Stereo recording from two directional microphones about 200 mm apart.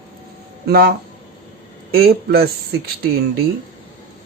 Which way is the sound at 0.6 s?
50° right (ahead or behind).